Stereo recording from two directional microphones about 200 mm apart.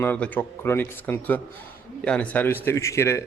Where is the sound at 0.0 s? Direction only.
10° left (ahead or behind).